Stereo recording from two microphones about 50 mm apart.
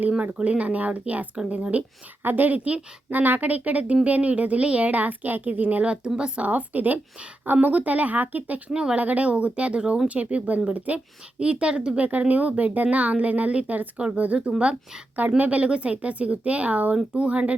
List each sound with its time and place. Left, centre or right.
0.2 s speech: right
2.2 s a woman's voice: right
5.8 s a woman's voice: right
8.7 s speech: centre
9.0 s speech: right
12.3 s a woman's voice: right